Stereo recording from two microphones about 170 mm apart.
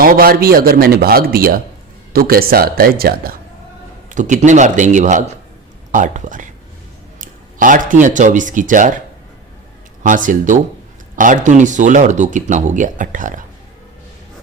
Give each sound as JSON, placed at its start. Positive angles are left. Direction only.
{"t": 0.0, "sound": "speech", "side_deg": -60}
{"t": 4.1, "sound": "speech", "side_deg": -45}
{"t": 10.0, "sound": "speech", "side_deg": -50}